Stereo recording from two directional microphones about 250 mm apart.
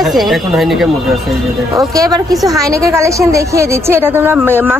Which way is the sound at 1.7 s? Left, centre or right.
Centre.